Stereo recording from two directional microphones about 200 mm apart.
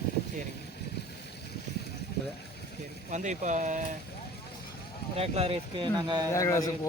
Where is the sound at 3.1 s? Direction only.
35° right (ahead or behind).